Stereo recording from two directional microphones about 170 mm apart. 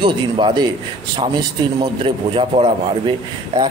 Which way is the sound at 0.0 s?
30° right (ahead or behind).